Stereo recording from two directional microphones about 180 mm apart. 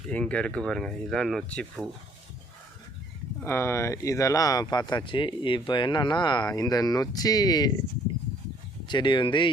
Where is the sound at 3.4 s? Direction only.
15° left (ahead or behind).